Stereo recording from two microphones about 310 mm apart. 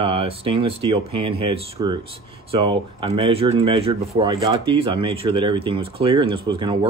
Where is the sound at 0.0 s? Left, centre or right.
Centre.